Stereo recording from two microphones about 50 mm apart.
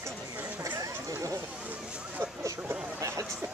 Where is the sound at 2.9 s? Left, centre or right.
Right.